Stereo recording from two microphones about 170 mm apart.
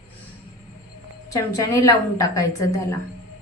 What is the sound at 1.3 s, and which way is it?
A woman's voice, 20° left (ahead or behind).